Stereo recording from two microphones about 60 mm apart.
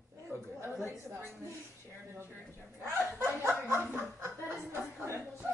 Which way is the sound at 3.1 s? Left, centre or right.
Right.